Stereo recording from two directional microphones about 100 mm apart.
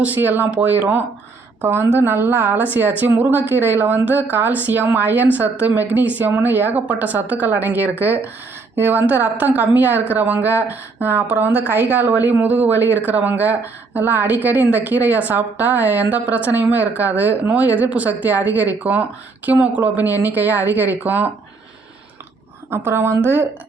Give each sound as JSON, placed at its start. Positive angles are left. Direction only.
{"t": 0.0, "sound": "speech", "side_deg": -15}
{"t": 22.7, "sound": "speech", "side_deg": -25}